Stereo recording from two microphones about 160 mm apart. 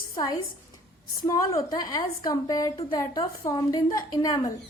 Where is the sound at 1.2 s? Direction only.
20° left (ahead or behind).